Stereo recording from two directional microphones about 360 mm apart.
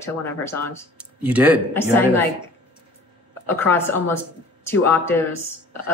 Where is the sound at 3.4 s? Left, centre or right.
Centre.